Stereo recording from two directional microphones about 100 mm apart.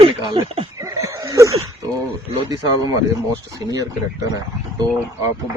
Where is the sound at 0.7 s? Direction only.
35° right (ahead or behind).